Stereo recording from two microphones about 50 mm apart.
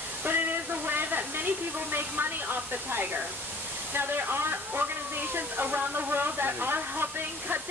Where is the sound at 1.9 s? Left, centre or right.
Right.